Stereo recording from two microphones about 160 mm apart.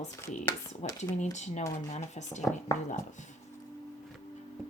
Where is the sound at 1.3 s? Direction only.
45° left (ahead or behind).